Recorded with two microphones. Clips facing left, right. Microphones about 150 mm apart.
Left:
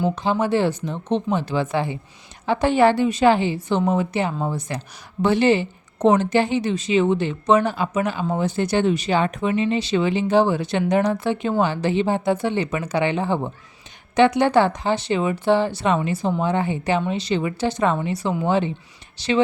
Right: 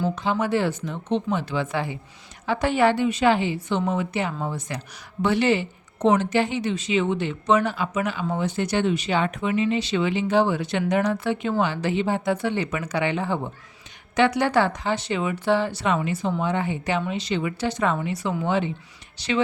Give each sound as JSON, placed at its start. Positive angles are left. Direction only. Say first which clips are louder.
{"t": 0.2, "sound": "speech", "louder": "left 3 dB", "side_deg": 30}
{"t": 6.0, "sound": "speech", "louder": "left 3 dB", "side_deg": 40}